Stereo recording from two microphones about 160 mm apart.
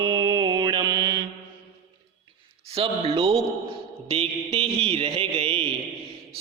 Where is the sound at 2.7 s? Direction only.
35° right (ahead or behind).